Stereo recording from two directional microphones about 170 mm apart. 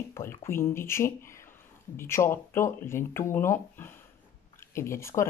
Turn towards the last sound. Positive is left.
turn(degrees=15)  # may be behind; listen again after turning